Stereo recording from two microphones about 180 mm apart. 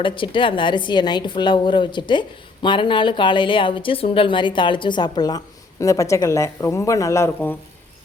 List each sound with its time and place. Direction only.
0.0 s a woman's voice: 25° left (ahead or behind)